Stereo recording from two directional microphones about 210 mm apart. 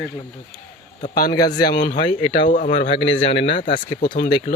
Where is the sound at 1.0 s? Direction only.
45° left (ahead or behind).